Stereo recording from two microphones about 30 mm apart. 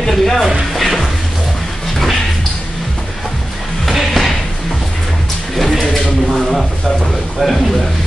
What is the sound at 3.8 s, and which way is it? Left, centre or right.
Music, centre.